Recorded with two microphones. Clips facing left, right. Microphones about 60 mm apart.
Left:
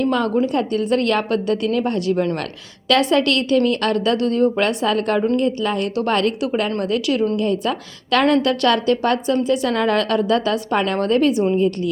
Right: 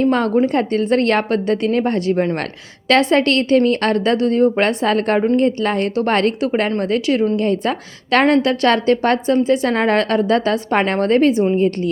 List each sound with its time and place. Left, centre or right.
0.0 s a woman's voice: right